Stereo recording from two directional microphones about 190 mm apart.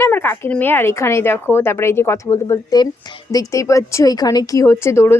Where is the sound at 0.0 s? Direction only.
10° left (ahead or behind).